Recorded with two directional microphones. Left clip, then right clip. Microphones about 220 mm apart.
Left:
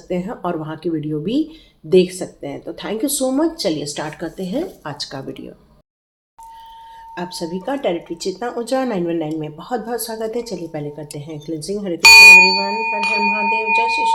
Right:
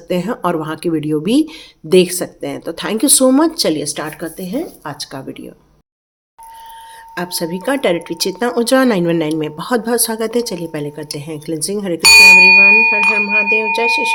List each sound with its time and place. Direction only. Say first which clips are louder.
0.1 s speech: right 6 dB; 35° right (ahead or behind); by 5.5 s 15° right (ahead or behind)
7.2 s speech: right 5 dB; 35° right (ahead or behind); by 13.9 s 55° right (ahead or behind)